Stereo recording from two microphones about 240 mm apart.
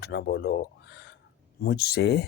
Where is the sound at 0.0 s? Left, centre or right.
Left.